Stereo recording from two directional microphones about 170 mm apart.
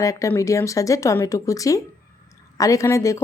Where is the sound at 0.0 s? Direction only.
20° left (ahead or behind).